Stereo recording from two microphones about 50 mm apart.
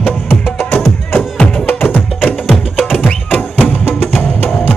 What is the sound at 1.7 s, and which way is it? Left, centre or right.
Music, left.